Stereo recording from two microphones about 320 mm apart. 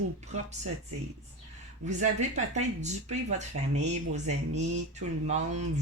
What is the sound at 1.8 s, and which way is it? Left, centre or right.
Speech, right.